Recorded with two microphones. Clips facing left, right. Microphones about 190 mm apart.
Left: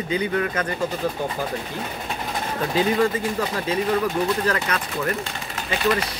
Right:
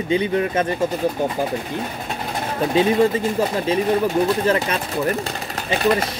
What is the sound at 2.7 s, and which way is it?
Speech, 25° right (ahead or behind).